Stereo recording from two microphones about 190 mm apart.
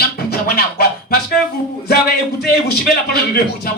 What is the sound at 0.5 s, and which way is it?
Speech, 55° left (ahead or behind).